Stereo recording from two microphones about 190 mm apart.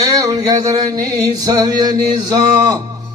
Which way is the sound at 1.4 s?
20° right (ahead or behind).